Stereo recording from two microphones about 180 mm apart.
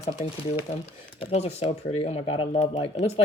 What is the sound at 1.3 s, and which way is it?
Speech, 35° left (ahead or behind).